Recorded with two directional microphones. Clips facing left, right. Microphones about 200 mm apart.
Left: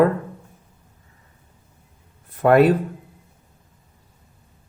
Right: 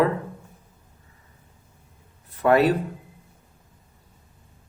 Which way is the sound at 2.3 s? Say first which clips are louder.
Left 4 dB; 55° left (ahead or behind).